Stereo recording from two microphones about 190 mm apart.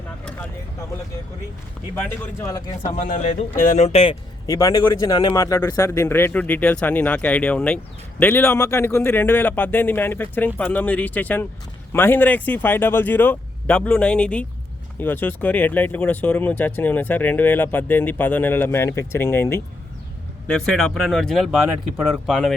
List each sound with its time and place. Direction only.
2.0 s speech: 15° left (ahead or behind)
2.9 s speech: 40° left (ahead or behind)
4.4 s speech: 20° left (ahead or behind); by 22.5 s centre (ahead or behind)